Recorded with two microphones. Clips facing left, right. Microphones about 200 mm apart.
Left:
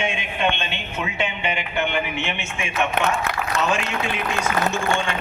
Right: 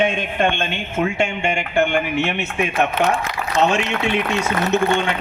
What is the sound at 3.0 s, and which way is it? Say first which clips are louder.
Speech: right 3 dB; 55° left (ahead or behind).